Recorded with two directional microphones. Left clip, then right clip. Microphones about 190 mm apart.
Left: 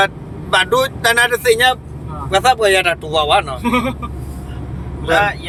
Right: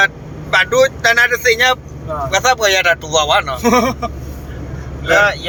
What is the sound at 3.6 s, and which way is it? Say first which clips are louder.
Speech: right 5 dB; 50° right (ahead or behind).